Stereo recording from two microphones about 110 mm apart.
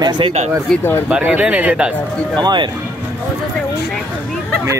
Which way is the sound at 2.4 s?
45° right (ahead or behind).